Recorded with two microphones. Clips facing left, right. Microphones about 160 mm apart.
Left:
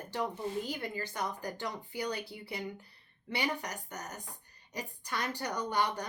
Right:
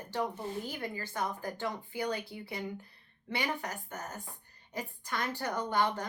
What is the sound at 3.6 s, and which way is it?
Speech, 15° left (ahead or behind).